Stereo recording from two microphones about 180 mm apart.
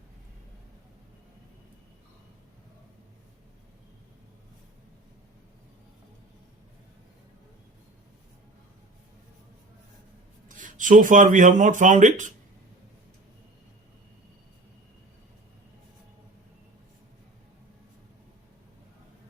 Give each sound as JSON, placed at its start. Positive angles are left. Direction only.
{"t": 10.6, "sound": "speech", "side_deg": -45}